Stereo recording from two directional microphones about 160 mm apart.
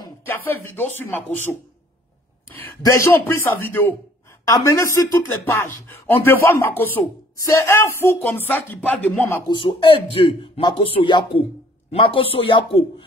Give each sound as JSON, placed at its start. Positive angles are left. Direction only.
{"t": 0.2, "sound": "speech", "side_deg": 15}
{"t": 2.5, "sound": "speech", "side_deg": 15}
{"t": 9.5, "sound": "speech", "side_deg": 30}